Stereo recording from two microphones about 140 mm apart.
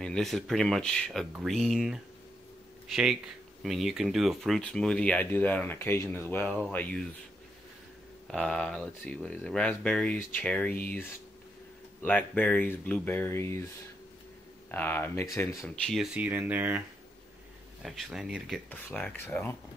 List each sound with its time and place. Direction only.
0.0 s speech: 5° left (ahead or behind)
8.3 s speech: 5° left (ahead or behind)
14.7 s speech: 15° left (ahead or behind)
15.7 s speech: 5° left (ahead or behind); by 16.8 s 10° right (ahead or behind)
17.8 s speech: centre (ahead or behind)
18.7 s speech: 15° left (ahead or behind)